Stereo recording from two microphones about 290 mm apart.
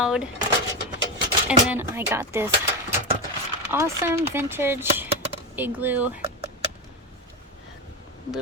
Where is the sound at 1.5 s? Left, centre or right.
Centre.